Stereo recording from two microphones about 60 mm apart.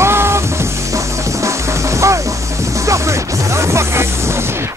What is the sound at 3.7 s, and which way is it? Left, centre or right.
Music, right.